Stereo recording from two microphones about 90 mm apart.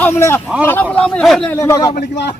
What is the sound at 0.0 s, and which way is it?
A man's voice, 25° left (ahead or behind).